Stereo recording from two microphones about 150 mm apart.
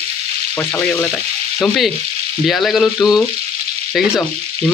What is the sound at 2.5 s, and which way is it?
Speech, centre (ahead or behind).